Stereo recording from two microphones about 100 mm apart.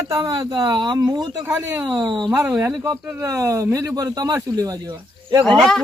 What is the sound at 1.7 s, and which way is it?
Speech, 10° right (ahead or behind).